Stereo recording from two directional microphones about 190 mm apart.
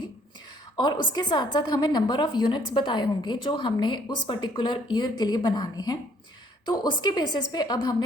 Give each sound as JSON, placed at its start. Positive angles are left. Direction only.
{"t": 0.8, "sound": "a woman's voice", "side_deg": 20}